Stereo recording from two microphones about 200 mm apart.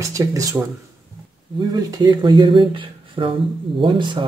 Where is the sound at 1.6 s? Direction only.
20° right (ahead or behind).